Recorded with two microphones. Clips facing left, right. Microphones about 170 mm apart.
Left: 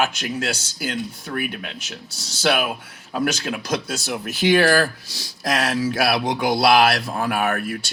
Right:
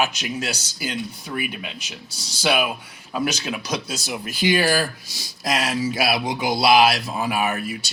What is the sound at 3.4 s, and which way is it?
Speech, 50° left (ahead or behind).